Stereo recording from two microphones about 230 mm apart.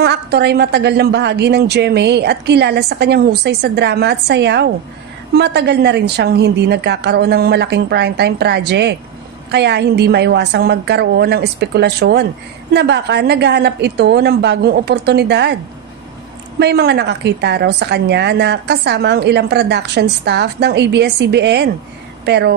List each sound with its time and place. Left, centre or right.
0.0 s a woman's voice: right
16.5 s a woman's voice: right